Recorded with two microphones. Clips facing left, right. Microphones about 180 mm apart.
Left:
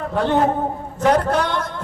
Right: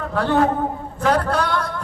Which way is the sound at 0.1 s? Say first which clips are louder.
Even; 20° left (ahead or behind).